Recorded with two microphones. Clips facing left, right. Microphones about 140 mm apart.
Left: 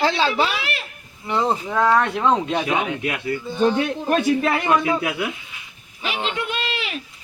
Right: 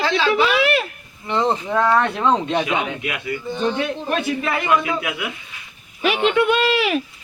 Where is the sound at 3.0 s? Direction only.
35° left (ahead or behind).